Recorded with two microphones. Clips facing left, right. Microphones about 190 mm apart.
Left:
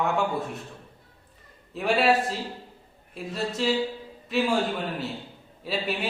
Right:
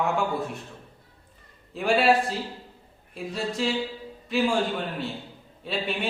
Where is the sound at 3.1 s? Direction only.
Centre (ahead or behind).